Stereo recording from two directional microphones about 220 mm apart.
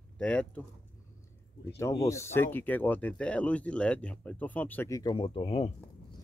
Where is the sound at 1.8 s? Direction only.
15° left (ahead or behind).